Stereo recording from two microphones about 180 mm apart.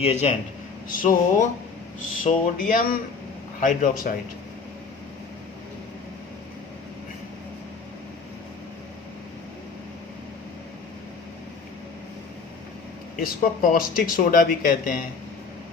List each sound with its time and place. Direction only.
0.0 s a man's voice: 35° left (ahead or behind)
0.9 s speech: 50° left (ahead or behind)
13.2 s speech: 50° left (ahead or behind)